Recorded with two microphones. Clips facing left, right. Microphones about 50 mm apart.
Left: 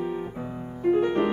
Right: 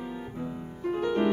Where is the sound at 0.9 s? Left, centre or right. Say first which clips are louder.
Left 2 dB; left.